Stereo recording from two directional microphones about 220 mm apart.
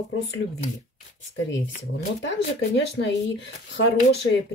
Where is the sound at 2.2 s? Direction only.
55° left (ahead or behind).